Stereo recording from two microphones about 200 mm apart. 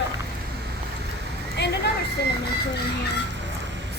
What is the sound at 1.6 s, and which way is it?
Vehicle, 60° left (ahead or behind).